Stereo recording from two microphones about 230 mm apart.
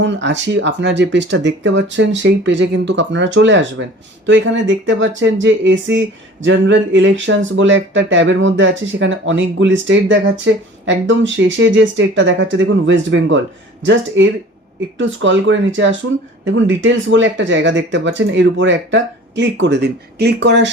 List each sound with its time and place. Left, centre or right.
0.0 s speech: right
14.9 s speech: right